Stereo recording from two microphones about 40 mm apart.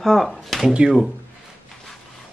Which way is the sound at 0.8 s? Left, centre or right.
Right.